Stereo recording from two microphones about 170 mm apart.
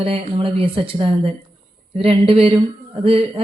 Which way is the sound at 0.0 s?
30° right (ahead or behind).